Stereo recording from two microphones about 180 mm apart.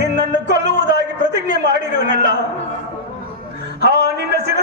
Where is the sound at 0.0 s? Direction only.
70° right (ahead or behind).